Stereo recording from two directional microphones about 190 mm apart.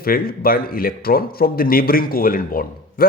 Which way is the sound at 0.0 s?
50° left (ahead or behind).